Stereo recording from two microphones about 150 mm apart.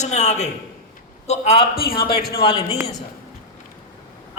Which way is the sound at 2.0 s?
90° left.